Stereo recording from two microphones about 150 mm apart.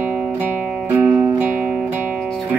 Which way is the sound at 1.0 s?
10° right (ahead or behind).